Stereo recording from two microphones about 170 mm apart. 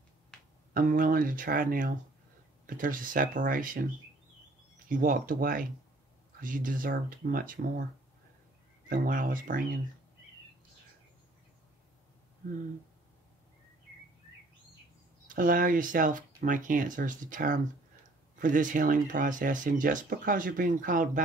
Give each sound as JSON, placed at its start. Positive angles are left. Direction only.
{"t": 0.3, "sound": "a sound", "side_deg": 5}
{"t": 0.7, "sound": "speech", "side_deg": -55}
{"t": 4.8, "sound": "speech", "side_deg": -55}
{"t": 8.8, "sound": "speech", "side_deg": -55}
{"t": 15.2, "sound": "speech", "side_deg": -55}